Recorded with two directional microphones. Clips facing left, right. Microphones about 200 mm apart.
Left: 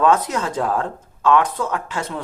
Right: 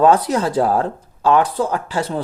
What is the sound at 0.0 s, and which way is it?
Speech, 35° right (ahead or behind).